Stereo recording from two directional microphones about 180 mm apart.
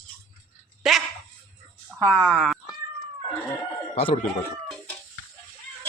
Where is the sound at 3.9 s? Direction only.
35° left (ahead or behind).